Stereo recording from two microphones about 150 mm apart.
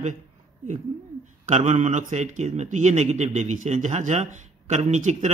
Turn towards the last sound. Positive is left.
turn(degrees=-50)  # may be behind; listen again after turning